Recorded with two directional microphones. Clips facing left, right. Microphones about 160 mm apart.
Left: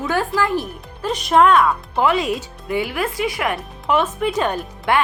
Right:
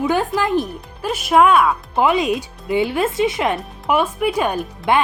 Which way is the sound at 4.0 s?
10° right (ahead or behind).